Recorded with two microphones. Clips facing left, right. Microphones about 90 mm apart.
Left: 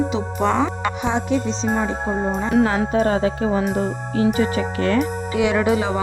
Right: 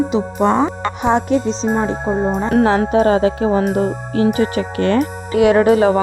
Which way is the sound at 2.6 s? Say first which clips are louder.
Right 5 dB; 80° right.